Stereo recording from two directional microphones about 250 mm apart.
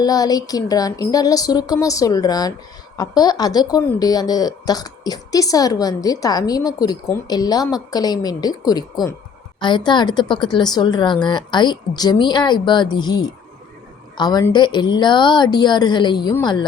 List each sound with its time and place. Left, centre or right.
0.0 s speech: centre